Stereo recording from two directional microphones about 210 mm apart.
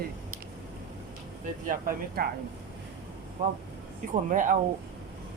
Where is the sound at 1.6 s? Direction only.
40° right (ahead or behind).